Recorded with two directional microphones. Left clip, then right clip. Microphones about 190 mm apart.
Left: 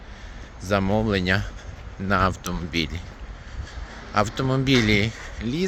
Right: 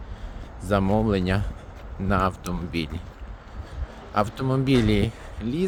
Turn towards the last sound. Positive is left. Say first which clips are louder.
# left 1 dB
turn(degrees=-5)  # may be behind; listen again after turning